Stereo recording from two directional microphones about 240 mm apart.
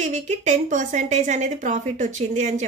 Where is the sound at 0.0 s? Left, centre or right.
Right.